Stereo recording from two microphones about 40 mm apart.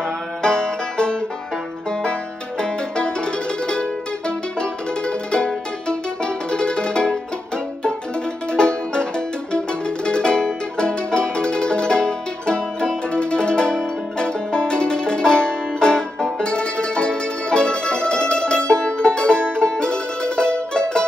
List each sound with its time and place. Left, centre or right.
0.4 s music: left
2.6 s music: left
8.5 s music: left